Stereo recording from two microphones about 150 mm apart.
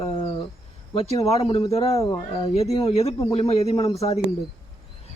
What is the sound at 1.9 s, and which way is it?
Speech, 20° left (ahead or behind).